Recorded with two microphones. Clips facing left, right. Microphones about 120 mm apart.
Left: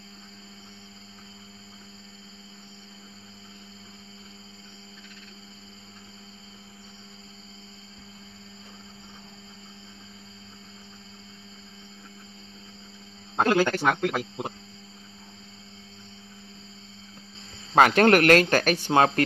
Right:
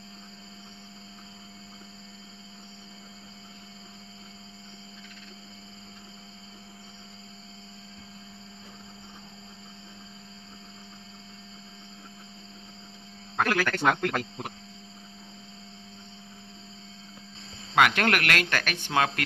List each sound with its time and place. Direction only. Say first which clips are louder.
13.4 s speech: left 5 dB; 25° left (ahead or behind)
13.7 s speech: left 1 dB; 5° left (ahead or behind)
17.7 s speech: left 6 dB; 35° left (ahead or behind)